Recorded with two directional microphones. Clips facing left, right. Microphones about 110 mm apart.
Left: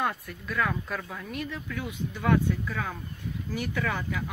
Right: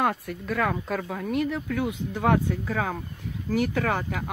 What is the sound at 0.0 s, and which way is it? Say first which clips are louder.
Speech: right 5 dB; 65° right (ahead or behind).